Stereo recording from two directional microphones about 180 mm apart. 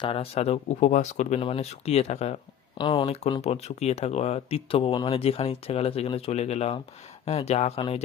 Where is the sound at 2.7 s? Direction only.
25° left (ahead or behind).